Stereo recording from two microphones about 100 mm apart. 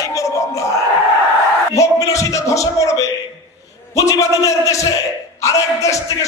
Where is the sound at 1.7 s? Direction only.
35° left (ahead or behind).